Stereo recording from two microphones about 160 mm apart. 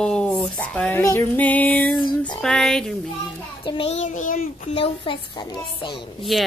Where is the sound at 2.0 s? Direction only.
30° left (ahead or behind).